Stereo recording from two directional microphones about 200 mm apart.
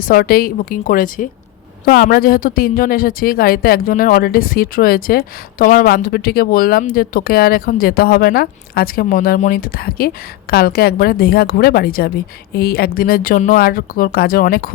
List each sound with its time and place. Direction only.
0.0 s speech: 45° left (ahead or behind)